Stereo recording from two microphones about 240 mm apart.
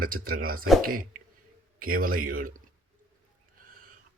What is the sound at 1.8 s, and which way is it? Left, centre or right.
Speech, right.